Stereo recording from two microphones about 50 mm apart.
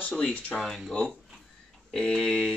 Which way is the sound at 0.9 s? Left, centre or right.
Centre.